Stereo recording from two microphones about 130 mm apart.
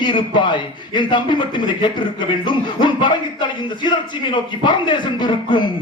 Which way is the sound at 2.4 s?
35° left (ahead or behind).